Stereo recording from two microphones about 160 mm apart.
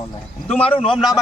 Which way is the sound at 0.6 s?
35° left (ahead or behind).